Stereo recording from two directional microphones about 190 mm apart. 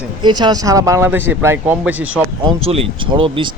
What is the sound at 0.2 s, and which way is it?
Speech, 25° right (ahead or behind).